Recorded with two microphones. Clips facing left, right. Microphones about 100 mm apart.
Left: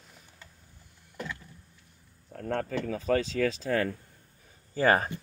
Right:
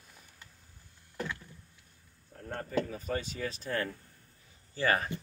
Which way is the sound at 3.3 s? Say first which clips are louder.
Left 8 dB; 90° left.